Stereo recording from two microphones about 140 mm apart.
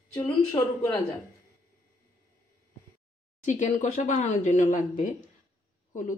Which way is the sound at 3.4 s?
60° left (ahead or behind).